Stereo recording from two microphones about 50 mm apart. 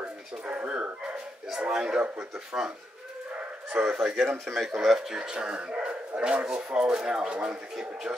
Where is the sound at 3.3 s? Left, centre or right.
Right.